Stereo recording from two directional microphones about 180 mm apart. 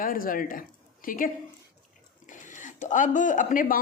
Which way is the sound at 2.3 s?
45° left (ahead or behind).